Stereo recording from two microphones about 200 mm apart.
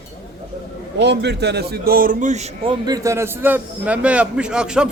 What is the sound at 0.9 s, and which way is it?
A man's voice, 60° right (ahead or behind).